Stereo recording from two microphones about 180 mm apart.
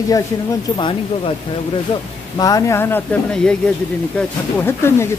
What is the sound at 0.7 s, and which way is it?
Speech, 25° left (ahead or behind).